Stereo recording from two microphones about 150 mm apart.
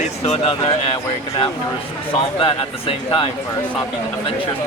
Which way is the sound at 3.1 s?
35° left (ahead or behind).